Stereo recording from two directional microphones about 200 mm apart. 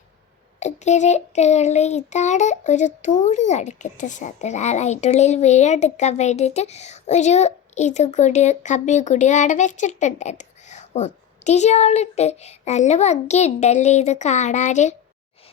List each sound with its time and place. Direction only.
0.6 s child singing: 35° left (ahead or behind)